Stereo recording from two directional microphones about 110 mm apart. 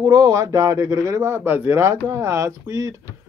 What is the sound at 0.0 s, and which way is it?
A man's voice, 35° right (ahead or behind).